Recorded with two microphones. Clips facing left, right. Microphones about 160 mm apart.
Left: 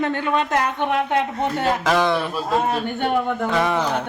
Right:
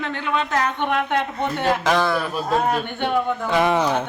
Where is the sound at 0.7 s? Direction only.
35° left (ahead or behind).